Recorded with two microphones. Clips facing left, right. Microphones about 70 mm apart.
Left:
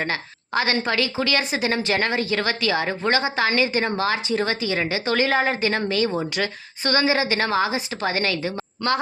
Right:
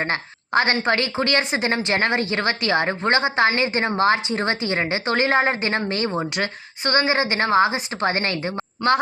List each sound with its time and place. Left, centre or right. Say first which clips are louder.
0.0 s a woman's voice: right 2 dB; right
1.4 s a woman's voice: right 1 dB; right